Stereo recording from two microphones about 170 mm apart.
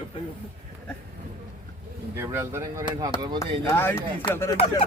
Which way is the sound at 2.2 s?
15° right (ahead or behind).